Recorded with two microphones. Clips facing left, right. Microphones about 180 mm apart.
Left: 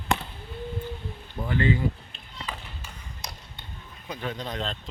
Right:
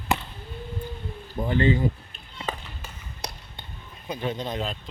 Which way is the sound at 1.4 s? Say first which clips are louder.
Right 3 dB; 25° right (ahead or behind).